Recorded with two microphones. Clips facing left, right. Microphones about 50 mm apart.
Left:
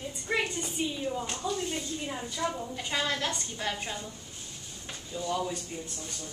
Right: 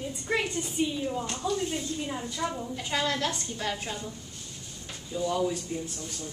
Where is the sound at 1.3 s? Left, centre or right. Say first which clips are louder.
Right 3 dB; centre.